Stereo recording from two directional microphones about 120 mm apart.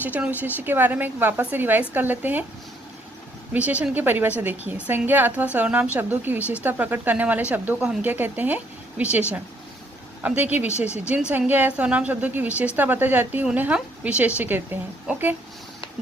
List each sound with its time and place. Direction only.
0.0 s a woman's voice: 15° right (ahead or behind)
3.5 s a woman's voice: 10° right (ahead or behind)
10.2 s a woman's voice: 15° right (ahead or behind)
10.8 s speech: 65° left (ahead or behind)
11.1 s a woman's voice: 10° right (ahead or behind)